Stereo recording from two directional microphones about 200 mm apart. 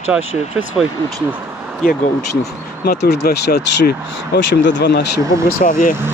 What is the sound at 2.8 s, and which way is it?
Speech, 55° left (ahead or behind).